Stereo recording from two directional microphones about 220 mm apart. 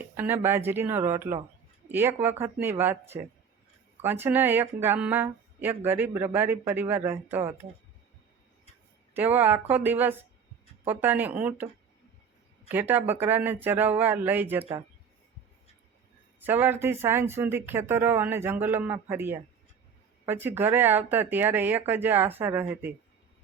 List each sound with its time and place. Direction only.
0.0 s speech: 10° right (ahead or behind)
9.1 s speech: 10° right (ahead or behind)
14.6 s speech: 25° right (ahead or behind)
16.4 s speech: 10° right (ahead or behind)